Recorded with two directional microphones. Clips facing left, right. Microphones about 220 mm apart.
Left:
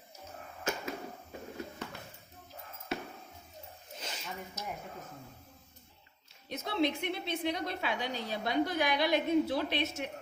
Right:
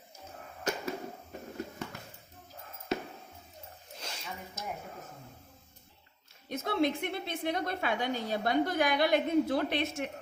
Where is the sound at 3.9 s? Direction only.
Centre (ahead or behind).